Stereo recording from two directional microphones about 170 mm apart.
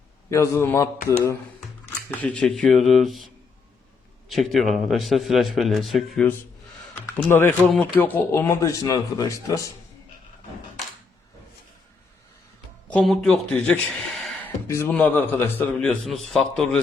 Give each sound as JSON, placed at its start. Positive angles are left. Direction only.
{"t": 0.3, "sound": "a man's voice", "side_deg": 15}
{"t": 4.3, "sound": "a man's voice", "side_deg": 0}
{"t": 6.9, "sound": "a man's voice", "side_deg": 15}
{"t": 12.9, "sound": "a man's voice", "side_deg": 5}